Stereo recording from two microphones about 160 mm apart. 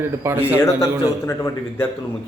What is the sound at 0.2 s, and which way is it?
Speech, 15° right (ahead or behind).